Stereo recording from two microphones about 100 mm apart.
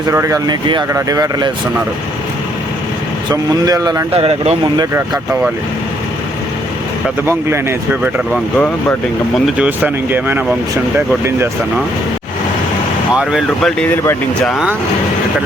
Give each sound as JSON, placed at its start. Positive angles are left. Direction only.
{"t": 0.1, "sound": "speech", "side_deg": -30}
{"t": 0.4, "sound": "speech", "side_deg": -45}
{"t": 0.9, "sound": "speech", "side_deg": -35}
{"t": 3.2, "sound": "speech", "side_deg": -40}
{"t": 4.1, "sound": "speech", "side_deg": -80}
{"t": 7.3, "sound": "speech", "side_deg": -25}
{"t": 8.5, "sound": "speech", "side_deg": 10}
{"t": 9.6, "sound": "speech", "side_deg": -15}
{"t": 13.6, "sound": "speech", "side_deg": 5}